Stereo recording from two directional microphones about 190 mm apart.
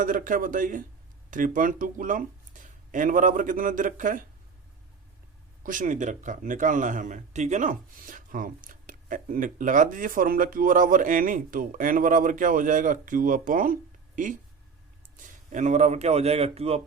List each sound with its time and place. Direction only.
0.0 s speech: 45° right (ahead or behind)
5.6 s speech: 45° right (ahead or behind)
15.3 s a man's voice: 40° right (ahead or behind)